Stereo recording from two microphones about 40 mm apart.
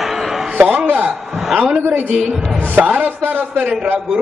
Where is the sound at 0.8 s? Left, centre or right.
Right.